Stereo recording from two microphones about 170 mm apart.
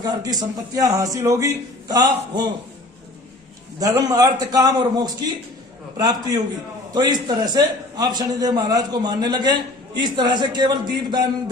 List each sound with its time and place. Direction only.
0.0 s a man's voice: 25° right (ahead or behind)
3.8 s a man's voice: 20° right (ahead or behind)